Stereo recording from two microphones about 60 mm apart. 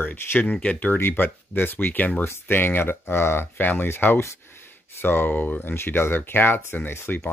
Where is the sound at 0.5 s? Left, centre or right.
Left.